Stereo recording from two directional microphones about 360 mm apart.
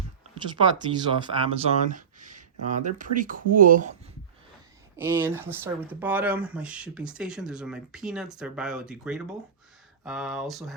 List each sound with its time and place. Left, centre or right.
0.6 s speech: centre
4.9 s speech: centre